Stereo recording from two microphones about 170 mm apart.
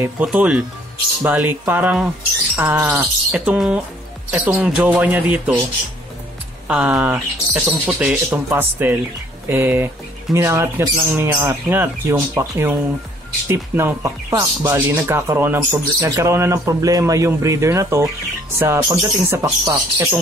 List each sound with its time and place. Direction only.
0.0 s speech: 10° right (ahead or behind)
6.7 s speech: 5° right (ahead or behind)
19.6 s speech: 25° right (ahead or behind)